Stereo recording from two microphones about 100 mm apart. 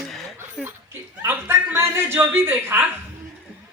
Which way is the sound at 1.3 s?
20° right (ahead or behind).